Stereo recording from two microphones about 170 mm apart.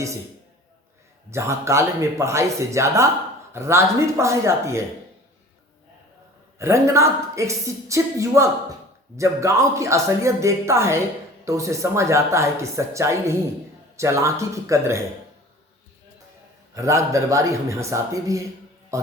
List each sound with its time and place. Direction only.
1.3 s speech: 15° right (ahead or behind)
6.6 s speech: 15° right (ahead or behind)
16.7 s speech: 15° right (ahead or behind)